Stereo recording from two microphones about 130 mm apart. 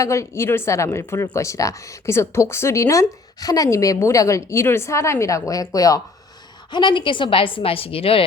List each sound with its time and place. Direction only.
0.0 s a woman's voice: 25° left (ahead or behind); by 8.2 s 45° left (ahead or behind)